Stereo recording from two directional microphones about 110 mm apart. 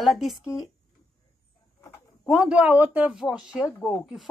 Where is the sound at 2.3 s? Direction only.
10° right (ahead or behind).